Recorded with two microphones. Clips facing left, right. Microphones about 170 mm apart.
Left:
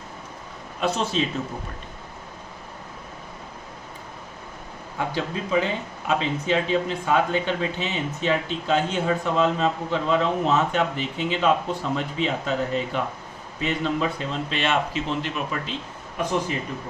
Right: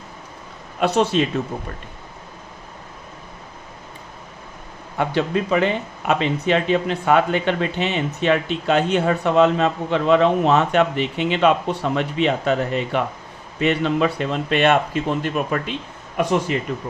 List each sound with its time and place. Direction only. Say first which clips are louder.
0.8 s speech: right 6 dB; 65° right (ahead or behind)
4.9 s speech: right 7 dB; 70° right (ahead or behind); by 15.7 s 55° right (ahead or behind)